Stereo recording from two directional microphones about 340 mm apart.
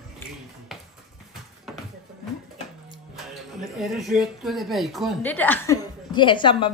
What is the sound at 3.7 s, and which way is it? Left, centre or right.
Speech, centre.